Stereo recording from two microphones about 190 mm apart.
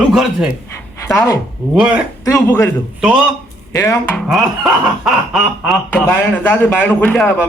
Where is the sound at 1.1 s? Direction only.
15° left (ahead or behind).